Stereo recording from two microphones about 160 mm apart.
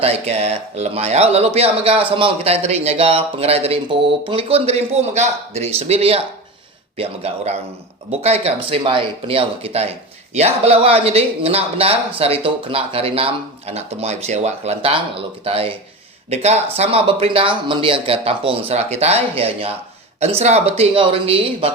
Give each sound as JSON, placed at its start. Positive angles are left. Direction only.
{"t": 0.0, "sound": "speech", "side_deg": -40}